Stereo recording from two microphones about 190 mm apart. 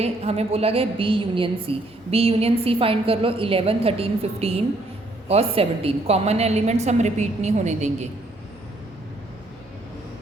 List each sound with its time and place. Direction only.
0.0 s a woman's voice: 30° right (ahead or behind)